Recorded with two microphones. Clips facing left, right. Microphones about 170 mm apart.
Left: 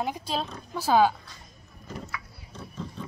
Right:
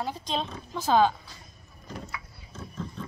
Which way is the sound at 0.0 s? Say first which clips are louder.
Left 1 dB; 10° left (ahead or behind).